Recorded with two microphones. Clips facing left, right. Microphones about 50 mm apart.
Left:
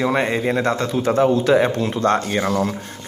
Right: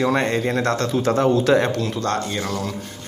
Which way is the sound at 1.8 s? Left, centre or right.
Left.